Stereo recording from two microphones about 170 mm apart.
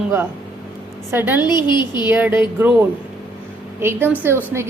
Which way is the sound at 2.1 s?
10° right (ahead or behind).